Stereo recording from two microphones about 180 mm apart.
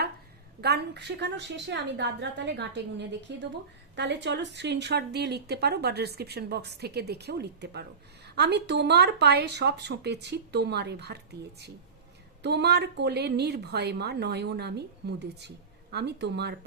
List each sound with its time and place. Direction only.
0.6 s a woman's voice: 65° right (ahead or behind)
12.4 s a woman's voice: 70° right (ahead or behind)